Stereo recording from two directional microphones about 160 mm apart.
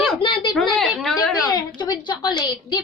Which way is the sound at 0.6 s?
Centre (ahead or behind).